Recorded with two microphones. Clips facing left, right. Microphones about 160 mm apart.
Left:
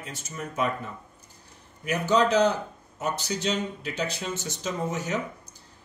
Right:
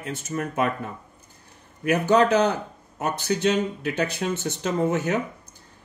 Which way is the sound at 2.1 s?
55° right (ahead or behind).